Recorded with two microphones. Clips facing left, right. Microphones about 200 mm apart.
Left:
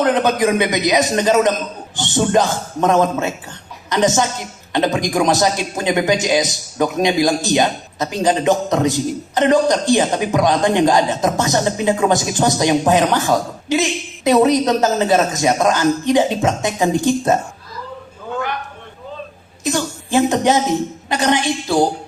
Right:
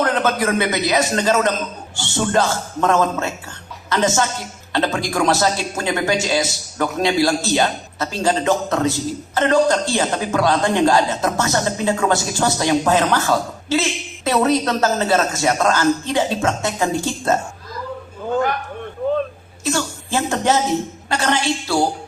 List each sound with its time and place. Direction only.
0.0 s a man's voice: 15° left (ahead or behind)
19.6 s a man's voice: 15° left (ahead or behind)